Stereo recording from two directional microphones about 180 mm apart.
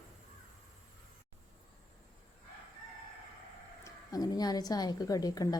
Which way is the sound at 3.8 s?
20° left (ahead or behind).